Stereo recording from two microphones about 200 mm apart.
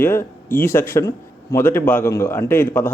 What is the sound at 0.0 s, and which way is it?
A man's voice, 10° left (ahead or behind).